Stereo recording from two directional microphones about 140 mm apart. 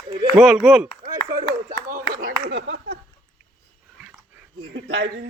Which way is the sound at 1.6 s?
90° right.